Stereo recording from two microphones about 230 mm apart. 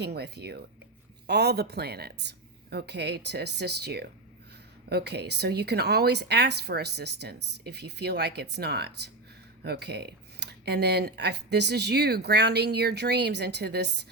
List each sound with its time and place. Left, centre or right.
0.0 s speech: right